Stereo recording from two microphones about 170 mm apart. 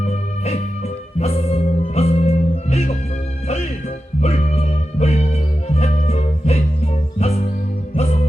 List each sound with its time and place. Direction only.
0.1 s music: 40° left (ahead or behind)